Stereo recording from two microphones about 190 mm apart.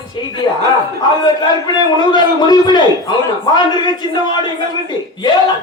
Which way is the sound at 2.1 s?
20° left (ahead or behind).